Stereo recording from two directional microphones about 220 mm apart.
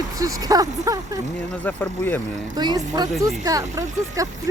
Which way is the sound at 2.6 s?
15° right (ahead or behind).